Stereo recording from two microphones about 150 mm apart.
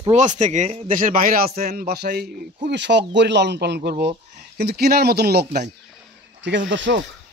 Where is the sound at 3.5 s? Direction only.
90° right.